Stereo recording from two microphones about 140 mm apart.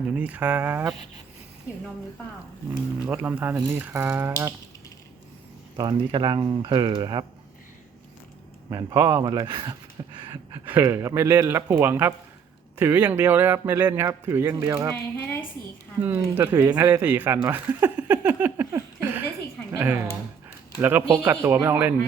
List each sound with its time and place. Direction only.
0.1 s a man's voice: 10° right (ahead or behind)
3.1 s a man's voice: 10° right (ahead or behind)
5.7 s speech: 30° right (ahead or behind)
8.7 s speech: 25° right (ahead or behind)
10.0 s a sound: 30° right (ahead or behind)
10.7 s a man's voice: 15° right (ahead or behind)
14.9 s a woman's voice: 15° left (ahead or behind)
16.0 s a man's voice: 15° right (ahead or behind)
21.2 s a man's voice: 15° right (ahead or behind)